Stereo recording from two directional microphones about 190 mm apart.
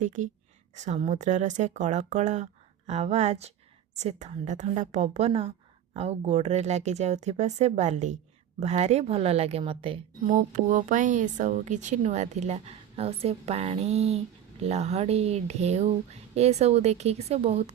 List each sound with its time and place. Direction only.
0.0 s a woman's voice: 40° right (ahead or behind)
10.3 s a woman's voice: 40° right (ahead or behind)